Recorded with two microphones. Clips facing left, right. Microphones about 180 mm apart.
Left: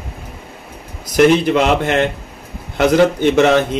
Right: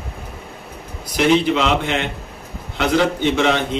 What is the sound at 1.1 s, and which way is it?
Speech, 50° left (ahead or behind).